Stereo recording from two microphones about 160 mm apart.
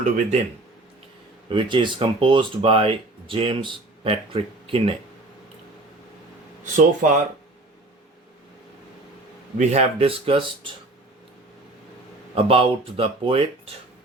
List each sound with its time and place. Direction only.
0.0 s speech: 50° right (ahead or behind)
1.5 s speech: 30° right (ahead or behind)
7.0 s speech: 55° right (ahead or behind)
9.6 s speech: 40° right (ahead or behind)
12.3 s speech: 35° right (ahead or behind)